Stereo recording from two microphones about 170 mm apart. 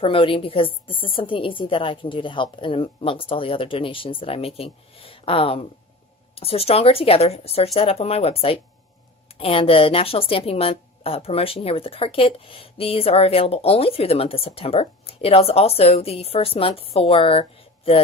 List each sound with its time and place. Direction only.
0.0 s a woman's voice: 30° left (ahead or behind)